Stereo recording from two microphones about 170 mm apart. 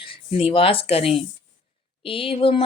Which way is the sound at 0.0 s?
30° left (ahead or behind).